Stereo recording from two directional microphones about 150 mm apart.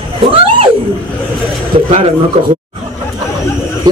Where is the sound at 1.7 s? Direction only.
45° right (ahead or behind).